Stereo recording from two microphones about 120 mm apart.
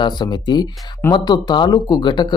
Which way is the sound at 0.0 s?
35° left (ahead or behind).